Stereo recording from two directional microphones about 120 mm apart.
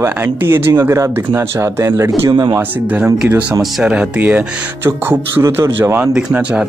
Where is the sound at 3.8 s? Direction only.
10° right (ahead or behind).